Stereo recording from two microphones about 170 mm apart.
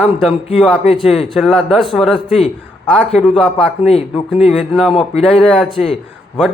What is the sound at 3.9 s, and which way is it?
Speech, 35° left (ahead or behind).